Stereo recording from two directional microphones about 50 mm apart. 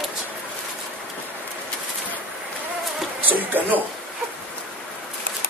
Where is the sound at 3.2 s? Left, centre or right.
Right.